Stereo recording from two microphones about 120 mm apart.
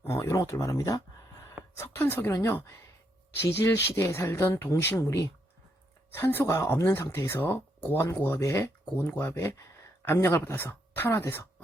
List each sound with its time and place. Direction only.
0.0 s speech: 25° left (ahead or behind)